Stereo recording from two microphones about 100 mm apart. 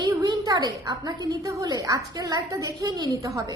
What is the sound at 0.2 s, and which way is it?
A woman's voice, 40° right (ahead or behind).